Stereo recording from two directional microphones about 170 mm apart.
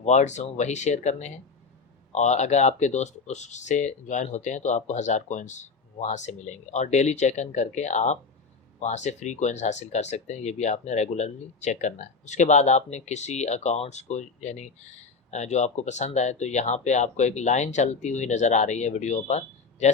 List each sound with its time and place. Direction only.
0.0 s speech: 40° left (ahead or behind)